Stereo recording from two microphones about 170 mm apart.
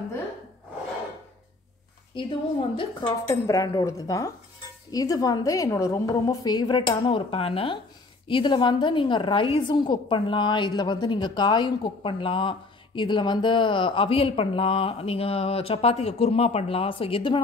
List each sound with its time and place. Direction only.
2.1 s a woman's voice: 30° left (ahead or behind)
3.3 s a woman's voice: 20° left (ahead or behind)